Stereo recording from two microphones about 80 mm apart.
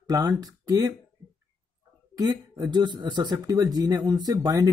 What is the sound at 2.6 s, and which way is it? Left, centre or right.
Speech, right.